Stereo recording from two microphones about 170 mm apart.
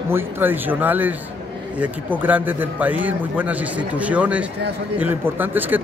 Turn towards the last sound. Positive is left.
turn(degrees=-10)  # may be behind; listen again after turning